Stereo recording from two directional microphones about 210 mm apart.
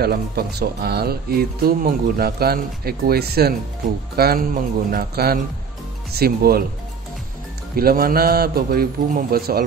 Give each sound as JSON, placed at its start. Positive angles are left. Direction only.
{"t": 0.0, "sound": "speech", "side_deg": -50}
{"t": 7.7, "sound": "speech", "side_deg": -45}